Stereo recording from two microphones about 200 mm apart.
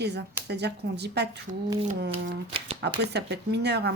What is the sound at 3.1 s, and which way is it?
Speech, 55° right (ahead or behind).